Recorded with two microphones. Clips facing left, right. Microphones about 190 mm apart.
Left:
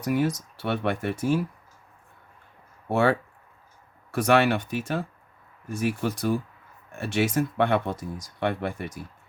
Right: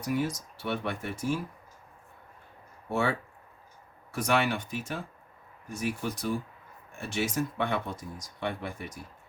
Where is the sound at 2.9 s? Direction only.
70° left (ahead or behind).